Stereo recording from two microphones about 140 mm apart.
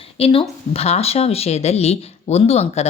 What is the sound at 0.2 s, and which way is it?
A woman's voice, 40° left (ahead or behind).